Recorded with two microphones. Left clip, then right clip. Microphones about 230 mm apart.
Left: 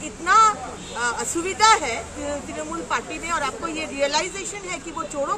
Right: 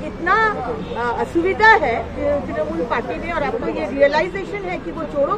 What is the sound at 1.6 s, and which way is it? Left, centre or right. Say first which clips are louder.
Speech: right 4 dB; centre.